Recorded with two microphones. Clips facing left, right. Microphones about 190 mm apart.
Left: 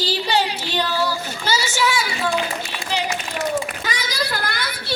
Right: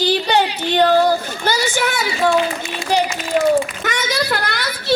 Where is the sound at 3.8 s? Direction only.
70° right (ahead or behind).